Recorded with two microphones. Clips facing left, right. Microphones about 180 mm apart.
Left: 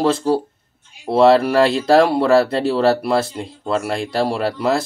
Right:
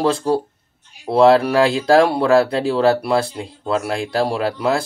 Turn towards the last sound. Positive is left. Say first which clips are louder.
# even
turn(degrees=0)  # may be behind; listen again after turning